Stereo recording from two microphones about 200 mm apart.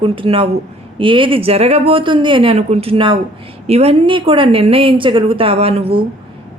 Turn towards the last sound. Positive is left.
turn(degrees=-30)  # may be behind; listen again after turning